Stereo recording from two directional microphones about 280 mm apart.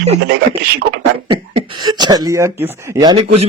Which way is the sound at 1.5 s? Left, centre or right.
Centre.